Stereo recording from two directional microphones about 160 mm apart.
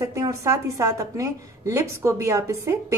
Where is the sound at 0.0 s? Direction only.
20° right (ahead or behind).